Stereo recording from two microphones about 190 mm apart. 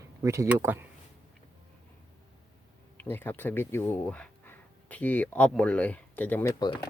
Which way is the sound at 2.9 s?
10° left (ahead or behind).